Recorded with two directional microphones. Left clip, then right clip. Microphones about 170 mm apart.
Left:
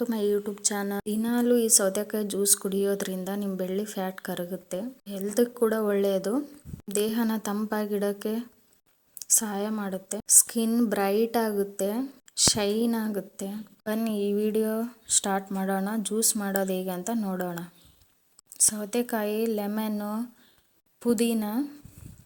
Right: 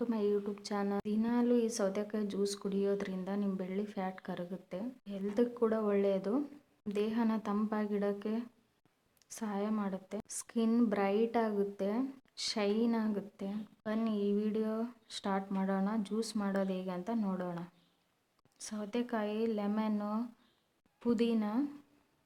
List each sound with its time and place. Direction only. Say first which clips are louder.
0.0 s speech: left 7 dB; 30° left (ahead or behind)